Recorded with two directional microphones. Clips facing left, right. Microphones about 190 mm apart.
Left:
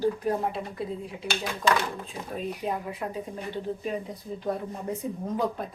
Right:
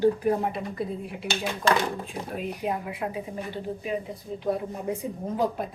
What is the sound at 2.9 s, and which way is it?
Speech, 10° right (ahead or behind).